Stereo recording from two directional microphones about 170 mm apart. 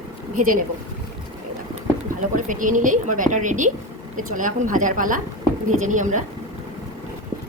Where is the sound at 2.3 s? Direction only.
50° right (ahead or behind).